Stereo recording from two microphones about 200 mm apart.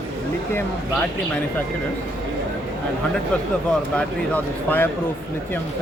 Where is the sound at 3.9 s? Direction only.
10° left (ahead or behind).